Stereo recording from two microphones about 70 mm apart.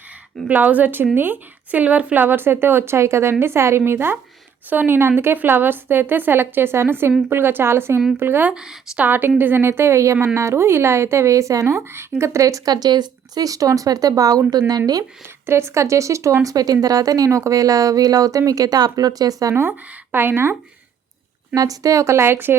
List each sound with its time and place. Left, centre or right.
0.4 s a woman's voice: right
8.4 s speech: centre
9.0 s a woman's voice: right
12.7 s speech: right
15.4 s speech: right
19.5 s a woman's voice: right
21.5 s a woman's voice: right